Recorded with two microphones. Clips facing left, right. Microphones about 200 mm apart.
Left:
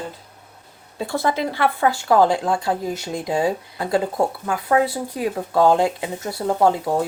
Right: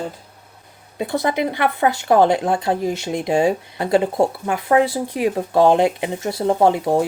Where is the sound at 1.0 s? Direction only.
15° right (ahead or behind).